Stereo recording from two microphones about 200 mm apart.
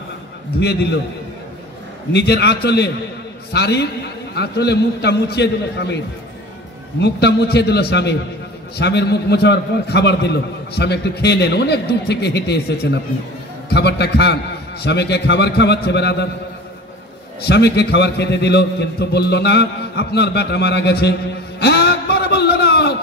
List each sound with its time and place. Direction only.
2.1 s a man's voice: 55° left (ahead or behind)
7.0 s a man's voice: 55° left (ahead or behind)
17.5 s a man's voice: 55° left (ahead or behind)